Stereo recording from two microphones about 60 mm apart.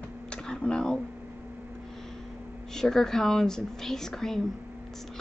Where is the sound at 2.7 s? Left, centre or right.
Centre.